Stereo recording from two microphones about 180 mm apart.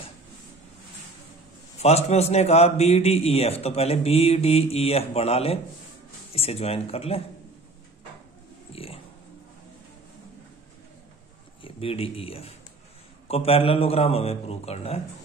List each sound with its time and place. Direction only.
1.8 s a man's voice: 35° left (ahead or behind)
8.7 s dog: 30° left (ahead or behind)
11.6 s a man's voice: 30° left (ahead or behind)